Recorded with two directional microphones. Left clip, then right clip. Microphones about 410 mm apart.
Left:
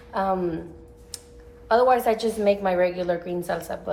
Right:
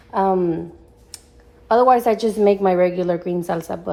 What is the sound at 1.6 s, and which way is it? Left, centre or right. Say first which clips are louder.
A woman's voice: right 5 dB; centre.